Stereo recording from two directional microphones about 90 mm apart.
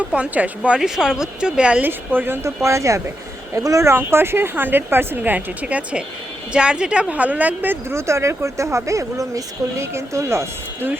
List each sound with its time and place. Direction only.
0.0 s speech: 15° right (ahead or behind)
1.9 s speech: 25° right (ahead or behind)